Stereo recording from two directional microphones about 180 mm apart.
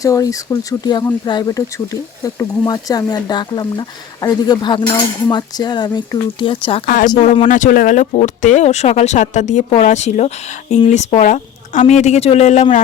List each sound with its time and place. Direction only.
0.0 s speech: 20° left (ahead or behind)
6.8 s speech: 50° left (ahead or behind)